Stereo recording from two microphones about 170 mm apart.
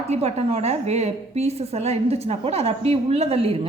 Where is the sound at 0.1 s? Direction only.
40° right (ahead or behind).